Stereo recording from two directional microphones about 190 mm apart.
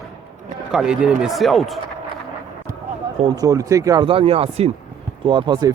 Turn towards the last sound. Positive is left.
turn(degrees=-20)  # may be behind; listen again after turning